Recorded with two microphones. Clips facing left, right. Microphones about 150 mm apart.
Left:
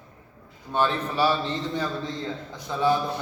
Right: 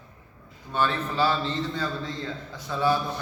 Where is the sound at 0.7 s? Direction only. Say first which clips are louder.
Left 2 dB; 15° left (ahead or behind).